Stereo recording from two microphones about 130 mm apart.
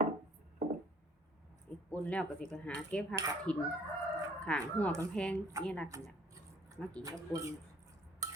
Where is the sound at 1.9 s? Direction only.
10° left (ahead or behind).